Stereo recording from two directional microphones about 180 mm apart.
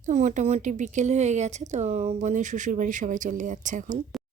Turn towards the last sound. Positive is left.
turn(degrees=-45)  # may be behind; listen again after turning